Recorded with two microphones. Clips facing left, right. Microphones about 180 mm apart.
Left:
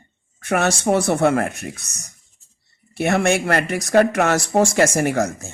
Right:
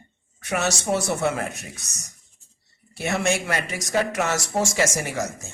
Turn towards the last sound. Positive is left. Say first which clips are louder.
# left 8 dB
turn(degrees=60)  # may be behind; listen again after turning